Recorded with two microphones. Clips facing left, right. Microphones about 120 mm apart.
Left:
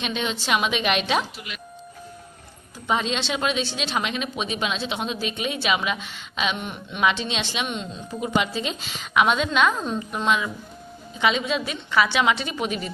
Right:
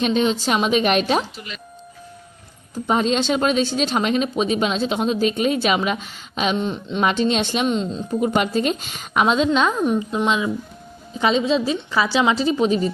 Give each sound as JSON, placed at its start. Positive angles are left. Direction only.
{"t": 0.0, "sound": "speech", "side_deg": -40}
{"t": 2.7, "sound": "speech", "side_deg": -40}
{"t": 8.3, "sound": "speech", "side_deg": -50}
{"t": 9.2, "sound": "a woman's voice", "side_deg": -30}
{"t": 9.7, "sound": "a woman's voice", "side_deg": -15}
{"t": 11.2, "sound": "speech", "side_deg": -35}